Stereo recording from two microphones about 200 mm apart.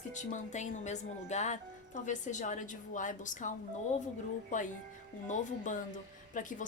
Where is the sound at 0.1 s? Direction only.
35° left (ahead or behind).